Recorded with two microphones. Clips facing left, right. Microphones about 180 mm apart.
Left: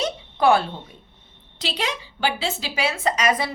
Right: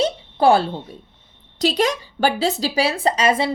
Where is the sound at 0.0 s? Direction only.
30° right (ahead or behind).